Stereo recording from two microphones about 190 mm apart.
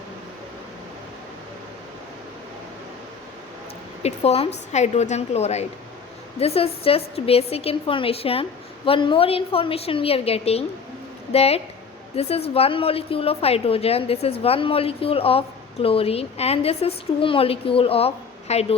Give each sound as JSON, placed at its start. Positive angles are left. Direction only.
{"t": 4.0, "sound": "a woman's voice", "side_deg": 35}